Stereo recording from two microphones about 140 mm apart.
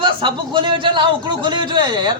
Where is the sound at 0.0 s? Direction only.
35° right (ahead or behind).